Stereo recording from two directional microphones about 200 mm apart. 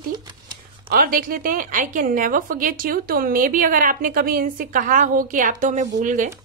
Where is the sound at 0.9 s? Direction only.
45° right (ahead or behind).